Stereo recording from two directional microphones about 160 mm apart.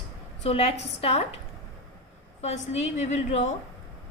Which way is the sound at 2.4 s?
45° left (ahead or behind).